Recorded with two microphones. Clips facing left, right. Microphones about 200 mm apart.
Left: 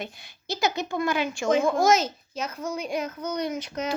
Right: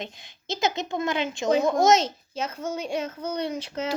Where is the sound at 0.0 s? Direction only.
20° right (ahead or behind).